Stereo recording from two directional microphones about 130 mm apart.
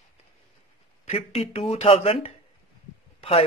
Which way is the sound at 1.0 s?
50° left (ahead or behind).